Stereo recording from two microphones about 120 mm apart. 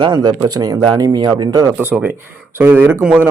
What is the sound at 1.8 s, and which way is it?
Speech, 15° right (ahead or behind).